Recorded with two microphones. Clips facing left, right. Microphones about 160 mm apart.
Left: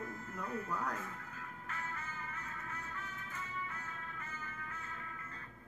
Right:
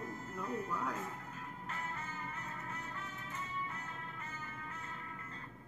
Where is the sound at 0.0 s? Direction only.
30° right (ahead or behind).